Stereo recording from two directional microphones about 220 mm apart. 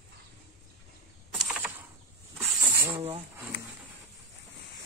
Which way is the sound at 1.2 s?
Centre (ahead or behind).